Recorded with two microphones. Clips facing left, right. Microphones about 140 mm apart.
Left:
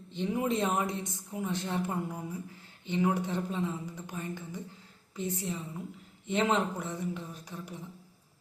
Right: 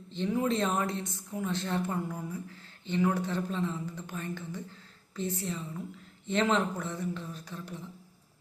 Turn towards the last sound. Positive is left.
turn(degrees=15)  # may be behind; listen again after turning